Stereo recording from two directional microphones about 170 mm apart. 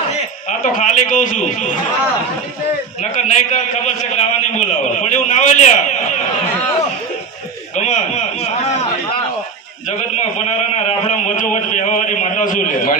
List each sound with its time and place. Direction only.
0.6 s a man's voice: 50° left (ahead or behind)
3.0 s a man's voice: 45° left (ahead or behind)
7.8 s a man's voice: 45° left (ahead or behind)
10.0 s a man's voice: 45° left (ahead or behind)